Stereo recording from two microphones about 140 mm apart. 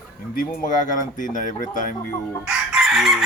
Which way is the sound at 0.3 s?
70° left (ahead or behind).